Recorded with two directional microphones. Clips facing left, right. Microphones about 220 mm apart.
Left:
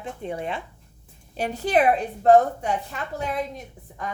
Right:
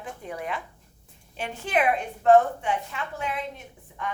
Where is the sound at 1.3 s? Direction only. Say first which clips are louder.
Left 5 dB; 40° left (ahead or behind).